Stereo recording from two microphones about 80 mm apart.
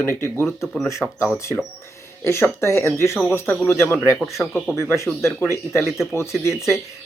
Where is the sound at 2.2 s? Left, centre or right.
Left.